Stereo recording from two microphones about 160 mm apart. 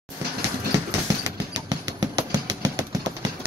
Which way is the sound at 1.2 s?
25° right (ahead or behind).